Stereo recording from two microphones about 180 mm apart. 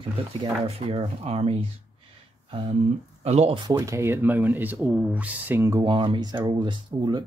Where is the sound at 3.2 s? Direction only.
35° right (ahead or behind).